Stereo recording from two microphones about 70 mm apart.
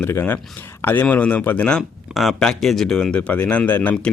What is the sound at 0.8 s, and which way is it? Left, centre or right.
Speech, left.